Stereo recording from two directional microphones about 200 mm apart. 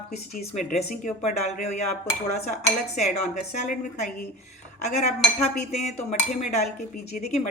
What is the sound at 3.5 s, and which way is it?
Speech, 35° left (ahead or behind).